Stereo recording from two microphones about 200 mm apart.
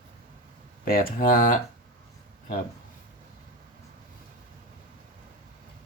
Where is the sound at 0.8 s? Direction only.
45° left (ahead or behind).